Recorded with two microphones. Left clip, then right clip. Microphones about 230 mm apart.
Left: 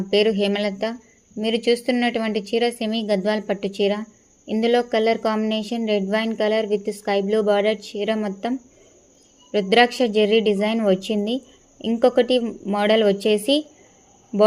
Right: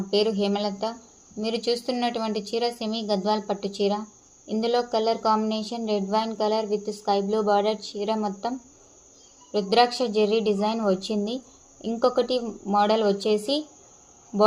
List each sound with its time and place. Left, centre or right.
0.1 s a woman's voice: left